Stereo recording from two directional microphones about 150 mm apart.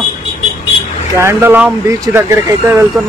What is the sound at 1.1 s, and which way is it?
Speech, 20° right (ahead or behind).